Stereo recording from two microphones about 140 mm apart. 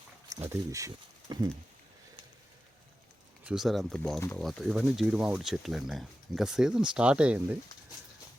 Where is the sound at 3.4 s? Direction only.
5° right (ahead or behind).